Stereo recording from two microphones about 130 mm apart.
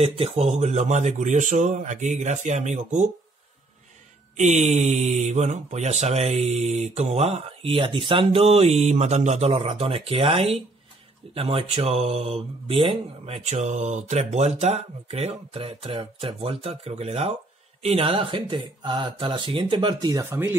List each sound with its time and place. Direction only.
0.0 s speech: 50° right (ahead or behind)
4.4 s speech: 60° right (ahead or behind); by 20.2 s 35° right (ahead or behind)
20.2 s speech: 20° right (ahead or behind)